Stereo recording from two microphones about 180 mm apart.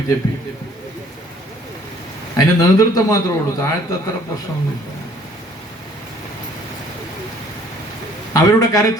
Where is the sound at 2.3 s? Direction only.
20° left (ahead or behind).